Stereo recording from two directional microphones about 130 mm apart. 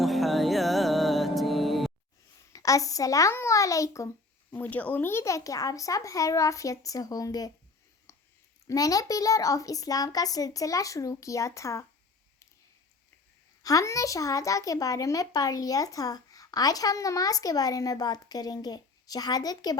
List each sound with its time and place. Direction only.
0.0 s music: centre (ahead or behind)
2.5 s a child's voice: 25° left (ahead or behind)
4.5 s a child's voice: 15° left (ahead or behind); by 7.5 s 30° left (ahead or behind)
8.1 s a sound: 25° left (ahead or behind)
8.6 s a child's voice: 30° left (ahead or behind)
13.6 s a child's voice: 25° left (ahead or behind)